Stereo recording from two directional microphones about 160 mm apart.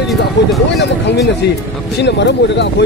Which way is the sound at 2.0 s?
90° left.